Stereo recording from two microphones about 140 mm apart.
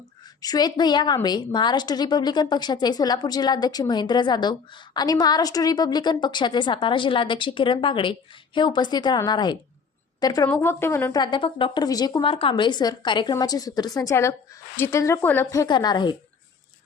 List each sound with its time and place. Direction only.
0.4 s a woman's voice: 30° left (ahead or behind)
11.2 s a woman's voice: 35° left (ahead or behind)